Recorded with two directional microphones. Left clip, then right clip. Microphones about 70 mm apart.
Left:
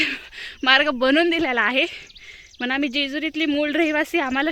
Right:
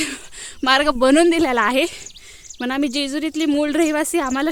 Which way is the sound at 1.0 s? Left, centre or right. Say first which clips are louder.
Right 4 dB; right.